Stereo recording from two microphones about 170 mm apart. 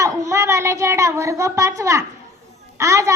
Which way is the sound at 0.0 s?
20° right (ahead or behind).